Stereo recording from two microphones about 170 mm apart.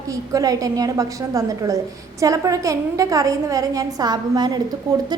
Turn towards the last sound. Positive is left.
turn(degrees=-25)  # may be behind; listen again after turning